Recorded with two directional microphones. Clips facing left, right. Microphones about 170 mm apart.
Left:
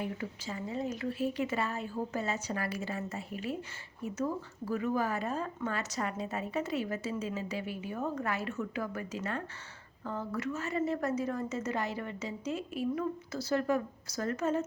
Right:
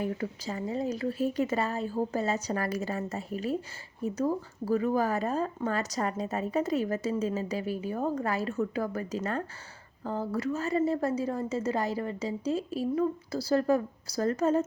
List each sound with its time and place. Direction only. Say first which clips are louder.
0.0 s speech: right 5 dB; 40° right (ahead or behind)